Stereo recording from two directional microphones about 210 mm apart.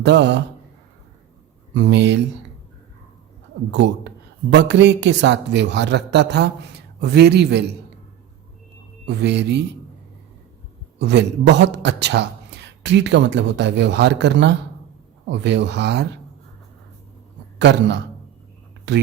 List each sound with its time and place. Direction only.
0.0 s a man's voice: 55° right (ahead or behind)
1.7 s a man's voice: 55° right (ahead or behind)
3.7 s a man's voice: 55° right (ahead or behind)
9.0 s speech: 55° right (ahead or behind)
11.0 s a man's voice: 55° right (ahead or behind)
17.6 s a man's voice: 55° right (ahead or behind)